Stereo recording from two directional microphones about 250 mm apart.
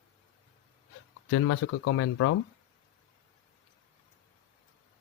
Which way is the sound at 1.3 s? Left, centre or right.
Left.